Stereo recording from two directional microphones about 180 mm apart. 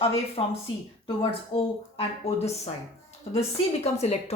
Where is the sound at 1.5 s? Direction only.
35° left (ahead or behind).